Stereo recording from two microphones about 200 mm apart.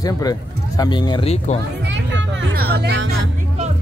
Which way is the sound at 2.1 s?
55° right (ahead or behind).